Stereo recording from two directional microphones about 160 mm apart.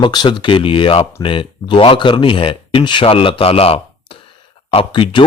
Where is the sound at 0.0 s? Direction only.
30° left (ahead or behind).